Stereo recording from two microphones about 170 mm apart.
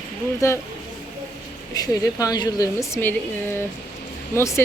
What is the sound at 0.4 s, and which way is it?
Speech, 20° left (ahead or behind).